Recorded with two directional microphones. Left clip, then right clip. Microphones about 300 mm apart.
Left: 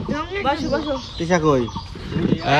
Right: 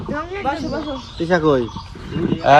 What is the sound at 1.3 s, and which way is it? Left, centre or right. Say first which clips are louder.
Turkey: right 2 dB; left.